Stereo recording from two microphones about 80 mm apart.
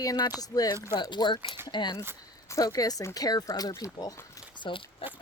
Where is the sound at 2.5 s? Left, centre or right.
Left.